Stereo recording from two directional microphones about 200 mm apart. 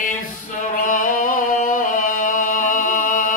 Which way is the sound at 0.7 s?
40° left (ahead or behind).